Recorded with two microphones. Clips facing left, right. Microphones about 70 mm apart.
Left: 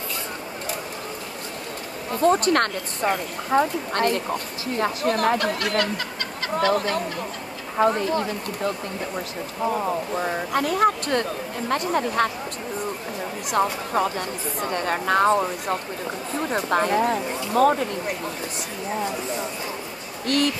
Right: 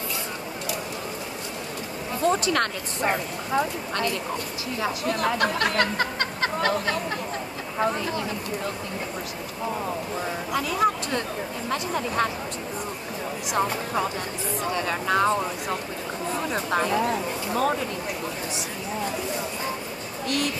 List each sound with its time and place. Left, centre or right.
2.1 s speech: left
5.8 s a sound: right
7.7 s speech: left
10.2 s speech: left
13.5 s speech: left
16.4 s speech: left
20.2 s speech: left